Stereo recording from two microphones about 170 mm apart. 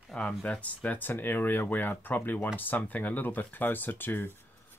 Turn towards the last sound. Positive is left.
turn(degrees=15)  # may be behind; listen again after turning